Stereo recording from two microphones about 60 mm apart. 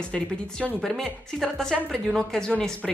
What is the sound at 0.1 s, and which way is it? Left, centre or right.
Speech, centre.